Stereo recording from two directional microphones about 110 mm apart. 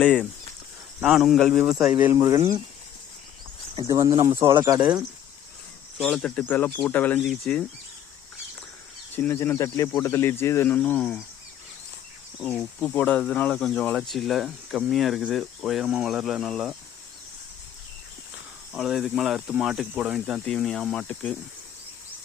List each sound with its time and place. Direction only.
0.0 s speech: 10° left (ahead or behind)
1.0 s speech: centre (ahead or behind)
2.1 s speech: 30° right (ahead or behind)
3.8 s speech: 35° right (ahead or behind)
4.1 s speech: 50° right (ahead or behind)
4.8 s speech: 10° right (ahead or behind)
6.1 s speech: 10° left (ahead or behind)
7.2 s speech: centre (ahead or behind)
9.1 s speech: 15° left (ahead or behind)
12.8 s speech: 15° left (ahead or behind); by 16.7 s 5° right (ahead or behind)
18.7 s speech: centre (ahead or behind)